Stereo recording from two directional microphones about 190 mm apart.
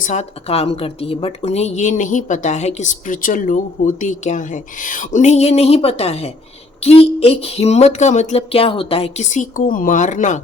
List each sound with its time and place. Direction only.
0.0 s speech: 35° left (ahead or behind)